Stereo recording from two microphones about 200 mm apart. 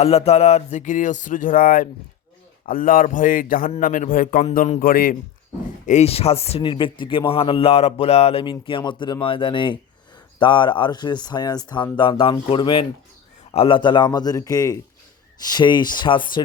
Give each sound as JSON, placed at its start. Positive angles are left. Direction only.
{"t": 0.0, "sound": "a man's voice", "side_deg": 30}
{"t": 5.8, "sound": "speech", "side_deg": 35}